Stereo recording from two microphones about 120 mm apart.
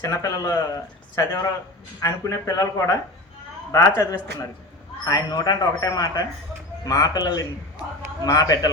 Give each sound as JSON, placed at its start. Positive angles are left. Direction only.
{"t": 0.0, "sound": "speech", "side_deg": 25}
{"t": 5.0, "sound": "a man's voice", "side_deg": 30}